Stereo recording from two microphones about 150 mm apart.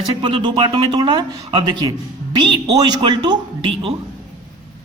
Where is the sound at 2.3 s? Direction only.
30° right (ahead or behind).